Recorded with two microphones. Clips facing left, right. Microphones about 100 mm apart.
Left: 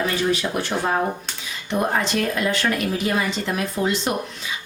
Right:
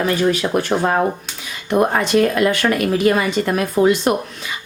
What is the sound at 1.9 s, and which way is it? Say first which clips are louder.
Speech: right 6 dB; 60° right (ahead or behind).